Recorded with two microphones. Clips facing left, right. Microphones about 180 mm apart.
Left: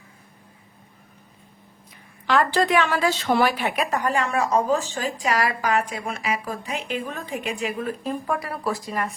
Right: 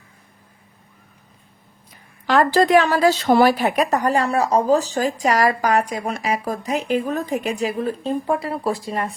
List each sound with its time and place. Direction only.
2.2 s a woman's voice: 40° right (ahead or behind)